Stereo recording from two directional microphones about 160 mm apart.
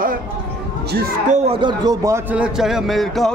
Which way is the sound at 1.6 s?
25° right (ahead or behind).